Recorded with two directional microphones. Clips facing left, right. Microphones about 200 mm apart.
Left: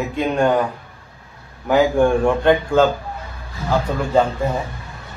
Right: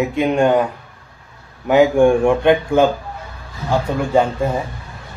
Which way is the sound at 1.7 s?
15° right (ahead or behind).